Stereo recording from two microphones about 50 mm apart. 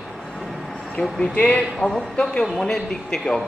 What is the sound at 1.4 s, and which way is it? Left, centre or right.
Speech, left.